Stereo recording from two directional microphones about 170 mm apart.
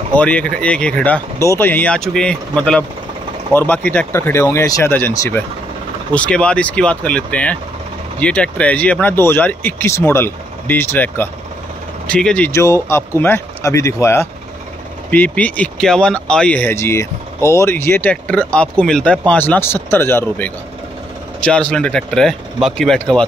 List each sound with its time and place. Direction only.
0.1 s speech: 10° left (ahead or behind)
12.4 s speech: 15° left (ahead or behind)